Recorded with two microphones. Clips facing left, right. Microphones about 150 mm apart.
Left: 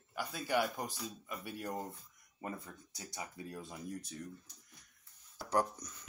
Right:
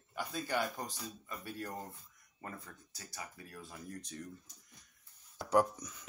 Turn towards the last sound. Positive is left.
turn(degrees=-5)  # may be behind; listen again after turning